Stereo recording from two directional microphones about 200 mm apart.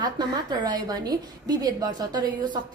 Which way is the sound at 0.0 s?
20° right (ahead or behind).